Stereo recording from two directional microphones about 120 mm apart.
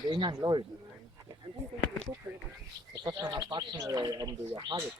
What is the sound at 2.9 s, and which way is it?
Speech, 35° right (ahead or behind).